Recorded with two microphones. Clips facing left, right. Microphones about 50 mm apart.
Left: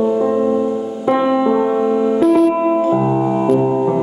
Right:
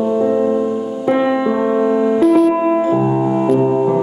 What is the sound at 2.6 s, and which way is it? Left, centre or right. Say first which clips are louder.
Music: even; centre.